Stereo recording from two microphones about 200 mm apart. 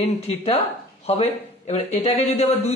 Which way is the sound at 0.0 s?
30° left (ahead or behind).